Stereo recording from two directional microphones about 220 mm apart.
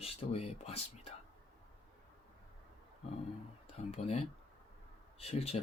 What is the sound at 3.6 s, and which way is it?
Speech, 30° left (ahead or behind).